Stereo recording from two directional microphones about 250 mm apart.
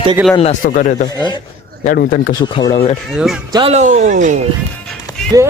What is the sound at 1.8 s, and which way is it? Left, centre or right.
Speech, left.